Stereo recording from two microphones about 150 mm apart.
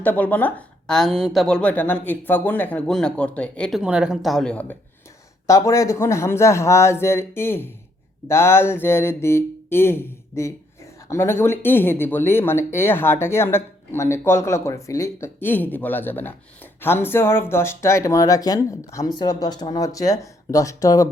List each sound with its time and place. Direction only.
0.0 s speech: 10° left (ahead or behind)
5.5 s speech: 20° left (ahead or behind)